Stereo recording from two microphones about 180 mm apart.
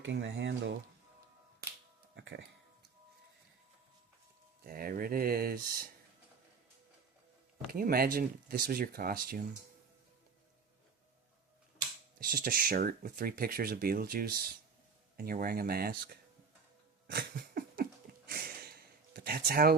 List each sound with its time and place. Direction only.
0.0 s speech: 85° right
2.1 s music: 70° right (ahead or behind)
4.6 s speech: 55° right (ahead or behind)
7.7 s speech: 55° right (ahead or behind)
12.2 s speech: 55° right (ahead or behind)
17.1 s a sound: 60° right (ahead or behind)